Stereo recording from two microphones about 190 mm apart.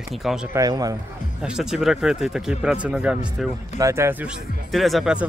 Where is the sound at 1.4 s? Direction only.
5° right (ahead or behind).